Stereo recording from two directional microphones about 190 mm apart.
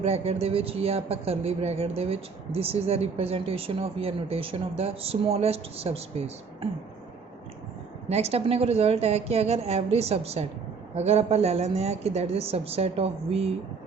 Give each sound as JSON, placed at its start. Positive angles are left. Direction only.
{"t": 0.0, "sound": "a man's voice", "side_deg": -35}
{"t": 8.1, "sound": "a man's voice", "side_deg": -35}